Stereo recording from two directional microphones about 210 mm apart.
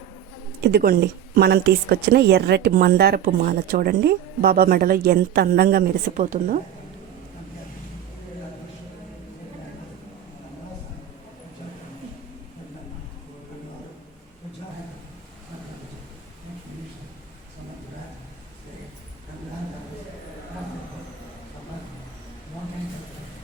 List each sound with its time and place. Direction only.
0.6 s speech: 50° right (ahead or behind)